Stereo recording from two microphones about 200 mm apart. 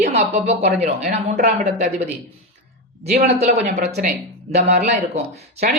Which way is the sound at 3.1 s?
35° right (ahead or behind).